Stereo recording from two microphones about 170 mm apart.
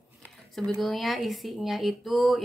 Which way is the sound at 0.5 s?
Centre (ahead or behind).